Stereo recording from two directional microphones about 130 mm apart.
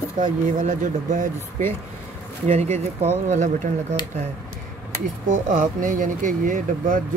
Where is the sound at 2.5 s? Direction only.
60° right (ahead or behind).